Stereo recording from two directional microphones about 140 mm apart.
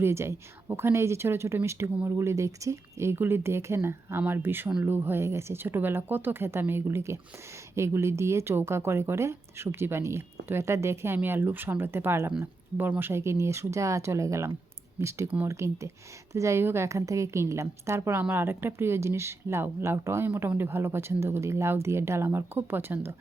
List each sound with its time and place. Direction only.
0.0 s a woman's voice: 20° right (ahead or behind)